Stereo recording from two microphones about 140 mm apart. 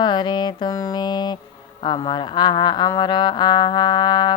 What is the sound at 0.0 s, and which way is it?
Music, 35° left (ahead or behind).